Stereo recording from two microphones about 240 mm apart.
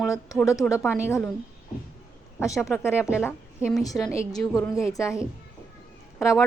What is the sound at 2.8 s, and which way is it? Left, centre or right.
A woman's voice, centre.